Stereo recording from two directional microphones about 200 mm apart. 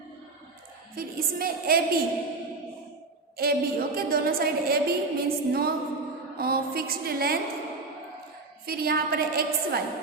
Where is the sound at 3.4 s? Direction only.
50° right (ahead or behind).